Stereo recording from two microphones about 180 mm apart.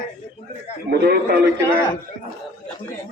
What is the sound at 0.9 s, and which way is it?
Speech, 60° right (ahead or behind).